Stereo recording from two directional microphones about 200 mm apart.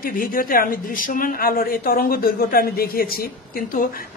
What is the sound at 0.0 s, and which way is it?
A man's voice, 45° left (ahead or behind).